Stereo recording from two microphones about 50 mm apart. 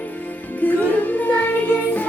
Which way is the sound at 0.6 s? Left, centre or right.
Left.